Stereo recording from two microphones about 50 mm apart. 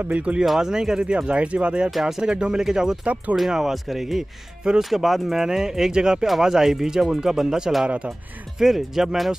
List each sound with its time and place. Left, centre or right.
0.2 s speech: right
0.5 s speech: centre
1.9 s speech: centre